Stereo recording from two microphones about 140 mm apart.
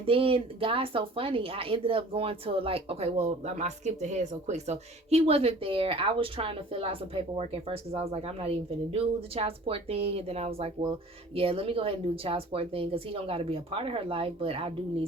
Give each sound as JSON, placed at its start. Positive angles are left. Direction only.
{"t": 0.0, "sound": "speech", "side_deg": -40}